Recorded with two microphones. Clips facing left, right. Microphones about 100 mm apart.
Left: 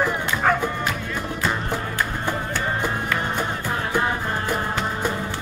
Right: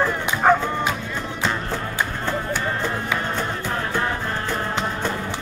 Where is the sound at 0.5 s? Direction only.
15° right (ahead or behind).